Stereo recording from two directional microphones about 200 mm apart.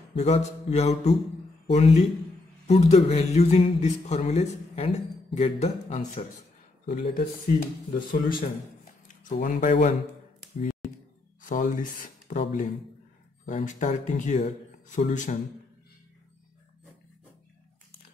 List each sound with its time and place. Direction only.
0.1 s speech: 30° left (ahead or behind)
6.9 s speech: 50° left (ahead or behind)
11.4 s speech: 40° left (ahead or behind)